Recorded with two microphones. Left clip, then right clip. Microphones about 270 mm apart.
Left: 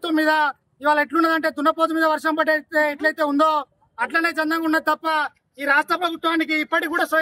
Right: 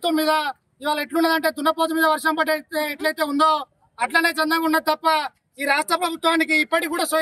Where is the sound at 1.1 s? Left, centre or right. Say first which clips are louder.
Left 1 dB; centre.